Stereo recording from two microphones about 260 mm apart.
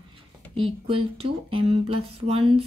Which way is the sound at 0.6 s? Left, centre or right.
Right.